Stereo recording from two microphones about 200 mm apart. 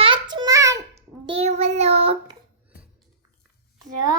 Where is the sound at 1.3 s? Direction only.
30° right (ahead or behind).